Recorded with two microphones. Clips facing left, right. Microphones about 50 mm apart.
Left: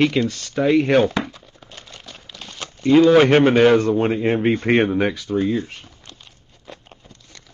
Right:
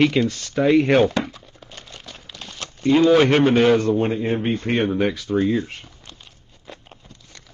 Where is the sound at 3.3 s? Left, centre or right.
Left.